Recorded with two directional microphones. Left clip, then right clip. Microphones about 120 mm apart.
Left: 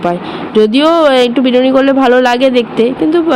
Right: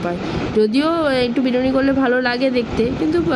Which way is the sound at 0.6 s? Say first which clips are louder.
Left 10 dB; 20° left (ahead or behind).